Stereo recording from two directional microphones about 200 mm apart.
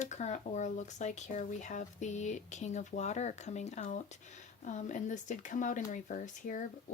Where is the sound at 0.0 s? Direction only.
35° left (ahead or behind).